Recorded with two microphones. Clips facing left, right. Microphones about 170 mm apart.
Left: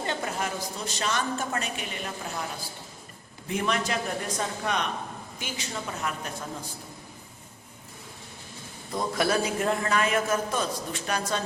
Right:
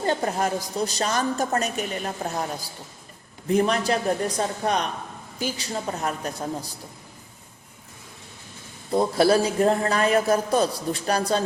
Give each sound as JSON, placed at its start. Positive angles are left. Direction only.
{"t": 0.0, "sound": "a woman's voice", "side_deg": -40}
{"t": 3.5, "sound": "a woman's voice", "side_deg": -35}
{"t": 8.9, "sound": "a woman's voice", "side_deg": -30}